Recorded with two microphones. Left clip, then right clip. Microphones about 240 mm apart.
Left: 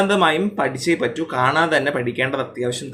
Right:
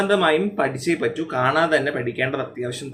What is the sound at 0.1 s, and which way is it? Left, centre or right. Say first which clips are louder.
Speech: left 1 dB; left.